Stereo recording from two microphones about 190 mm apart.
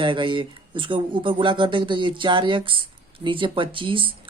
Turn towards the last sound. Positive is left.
turn(degrees=-25)  # may be behind; listen again after turning